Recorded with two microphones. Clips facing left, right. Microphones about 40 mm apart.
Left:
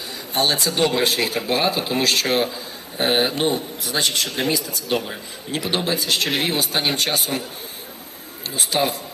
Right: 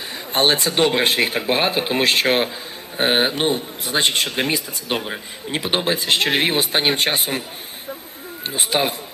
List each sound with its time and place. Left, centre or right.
0.3 s a man's voice: right
8.4 s a man's voice: right